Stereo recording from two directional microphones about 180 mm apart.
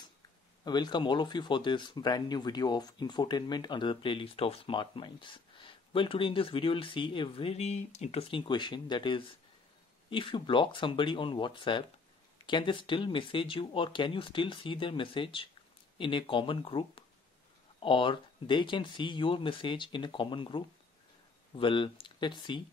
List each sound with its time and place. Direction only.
0.7 s speech: 25° left (ahead or behind)